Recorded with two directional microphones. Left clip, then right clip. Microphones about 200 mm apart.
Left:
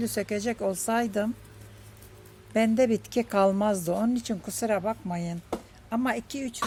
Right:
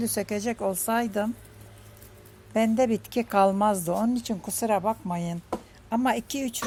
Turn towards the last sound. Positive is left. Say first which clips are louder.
# right 3 dB
turn(degrees=-25)  # may be behind; listen again after turning